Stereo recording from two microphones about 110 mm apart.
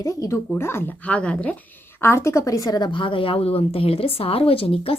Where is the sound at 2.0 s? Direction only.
25° left (ahead or behind).